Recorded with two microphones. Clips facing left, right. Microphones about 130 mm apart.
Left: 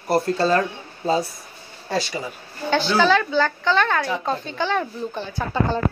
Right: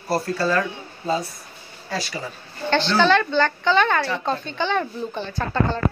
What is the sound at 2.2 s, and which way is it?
A woman's voice, 10° left (ahead or behind).